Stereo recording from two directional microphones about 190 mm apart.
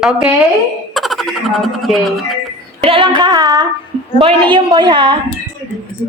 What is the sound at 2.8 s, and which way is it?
A woman's voice, 25° right (ahead or behind).